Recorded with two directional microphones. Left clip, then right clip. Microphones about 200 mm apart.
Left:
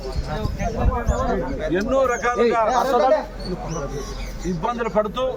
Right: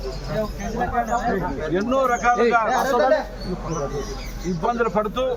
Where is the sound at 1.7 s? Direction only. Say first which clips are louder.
Left 1 dB; centre (ahead or behind).